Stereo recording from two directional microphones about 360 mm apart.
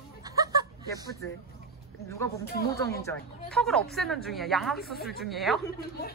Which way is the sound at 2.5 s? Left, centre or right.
Left.